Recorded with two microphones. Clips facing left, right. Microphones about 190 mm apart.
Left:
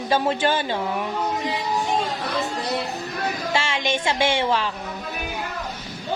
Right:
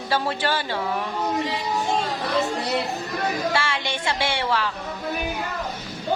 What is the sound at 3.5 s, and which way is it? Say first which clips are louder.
A woman's voice: left 2 dB; 25° left (ahead or behind).